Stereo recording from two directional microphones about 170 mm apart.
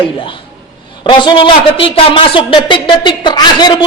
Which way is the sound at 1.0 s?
30° left (ahead or behind).